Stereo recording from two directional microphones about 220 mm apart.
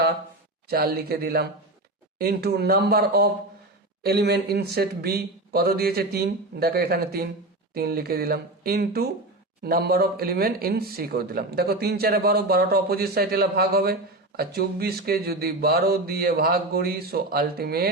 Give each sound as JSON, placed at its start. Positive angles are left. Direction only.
{"t": 0.7, "sound": "speech", "side_deg": -45}